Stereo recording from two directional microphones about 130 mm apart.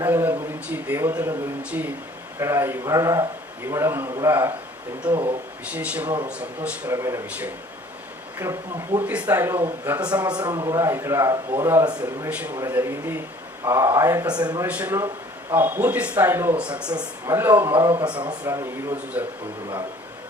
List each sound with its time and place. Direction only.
0.0 s a man's voice: 15° right (ahead or behind)
5.0 s a man's voice: 10° right (ahead or behind)
6.9 s a man's voice: 25° right (ahead or behind)
8.4 s a man's voice: 20° right (ahead or behind)
10.1 s a man's voice: 30° right (ahead or behind)
14.3 s a man's voice: 30° right (ahead or behind)
14.7 s a man's voice: 10° right (ahead or behind)
16.9 s a man's voice: 20° right (ahead or behind)
18.0 s a man's voice: 35° right (ahead or behind); by 19.2 s 20° right (ahead or behind)